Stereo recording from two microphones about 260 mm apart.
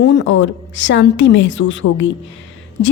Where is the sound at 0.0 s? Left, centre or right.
Left.